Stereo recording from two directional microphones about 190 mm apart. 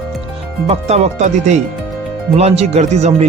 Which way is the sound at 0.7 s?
35° right (ahead or behind).